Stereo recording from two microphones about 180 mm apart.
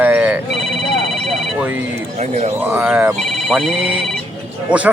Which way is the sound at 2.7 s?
5° right (ahead or behind).